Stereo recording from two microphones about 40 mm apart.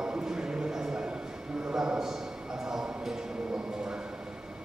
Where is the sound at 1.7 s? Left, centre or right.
Centre.